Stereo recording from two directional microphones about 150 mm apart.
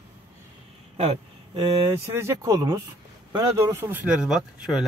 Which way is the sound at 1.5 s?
20° right (ahead or behind).